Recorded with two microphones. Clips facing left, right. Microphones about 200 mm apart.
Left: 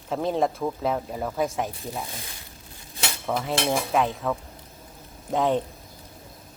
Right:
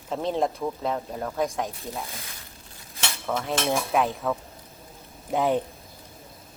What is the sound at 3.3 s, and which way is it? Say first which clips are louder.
Speech: left 1 dB; centre (ahead or behind).